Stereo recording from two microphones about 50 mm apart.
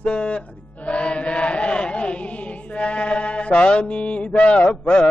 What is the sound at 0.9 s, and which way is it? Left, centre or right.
Chant, left.